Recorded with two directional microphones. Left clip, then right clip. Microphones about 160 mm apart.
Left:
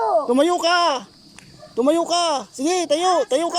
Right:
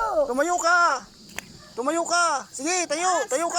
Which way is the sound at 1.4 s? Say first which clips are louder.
Right 11 dB; 70° right (ahead or behind).